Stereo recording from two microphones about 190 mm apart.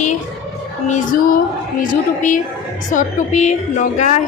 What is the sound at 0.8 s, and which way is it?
Female singing, 45° left (ahead or behind).